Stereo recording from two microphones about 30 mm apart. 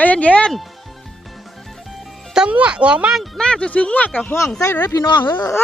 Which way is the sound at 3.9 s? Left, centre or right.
Left.